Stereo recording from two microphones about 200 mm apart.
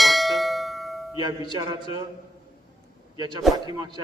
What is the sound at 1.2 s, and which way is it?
Speech, 20° right (ahead or behind).